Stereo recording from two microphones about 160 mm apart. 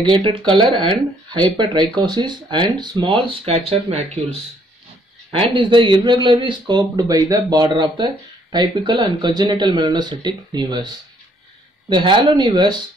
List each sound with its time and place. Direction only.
0.0 s speech: 30° right (ahead or behind)